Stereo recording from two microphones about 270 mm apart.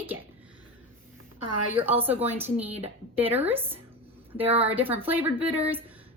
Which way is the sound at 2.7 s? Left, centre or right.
Right.